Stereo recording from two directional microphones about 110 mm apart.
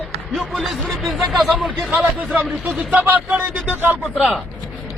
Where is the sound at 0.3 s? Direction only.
Centre (ahead or behind).